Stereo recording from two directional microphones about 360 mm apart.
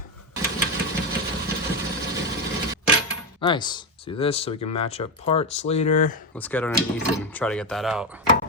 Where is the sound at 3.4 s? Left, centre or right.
Centre.